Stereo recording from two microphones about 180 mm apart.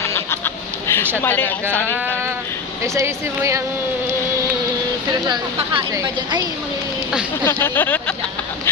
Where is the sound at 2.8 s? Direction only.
15° right (ahead or behind).